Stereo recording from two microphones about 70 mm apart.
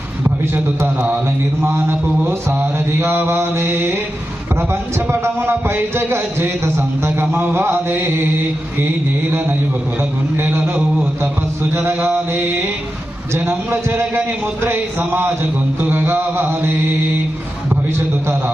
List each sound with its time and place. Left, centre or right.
0.5 s mantra: right
10.0 s a man's voice: right
11.7 s mantra: right